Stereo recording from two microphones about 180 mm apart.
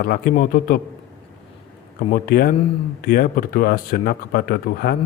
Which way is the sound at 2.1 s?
55° left (ahead or behind).